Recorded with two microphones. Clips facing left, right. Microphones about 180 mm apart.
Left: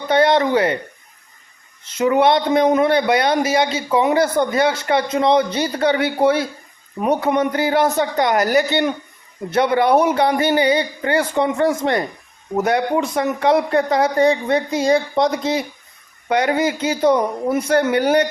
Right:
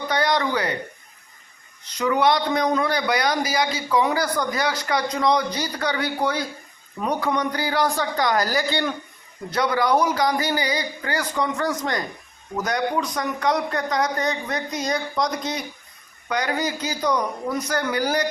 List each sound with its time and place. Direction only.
0.1 s speech: 25° left (ahead or behind)
2.0 s a man's voice: 25° left (ahead or behind)